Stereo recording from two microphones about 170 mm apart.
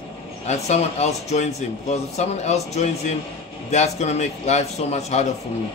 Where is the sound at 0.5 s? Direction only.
40° left (ahead or behind).